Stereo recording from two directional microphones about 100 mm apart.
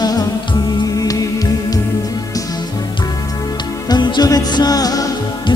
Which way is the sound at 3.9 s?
45° left (ahead or behind).